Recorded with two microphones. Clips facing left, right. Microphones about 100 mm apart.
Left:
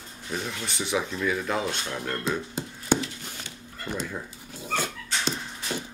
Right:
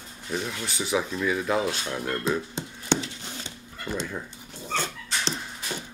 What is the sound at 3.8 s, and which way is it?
Dog, centre (ahead or behind).